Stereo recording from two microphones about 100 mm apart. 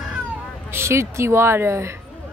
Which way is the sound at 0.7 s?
25° right (ahead or behind).